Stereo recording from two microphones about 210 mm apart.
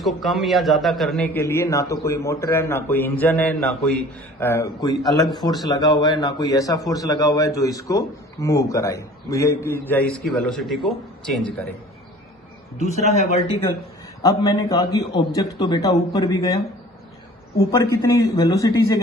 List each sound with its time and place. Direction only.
0.0 s a man's voice: centre (ahead or behind)
12.7 s a man's voice: 35° left (ahead or behind)
14.2 s a man's voice: 15° left (ahead or behind)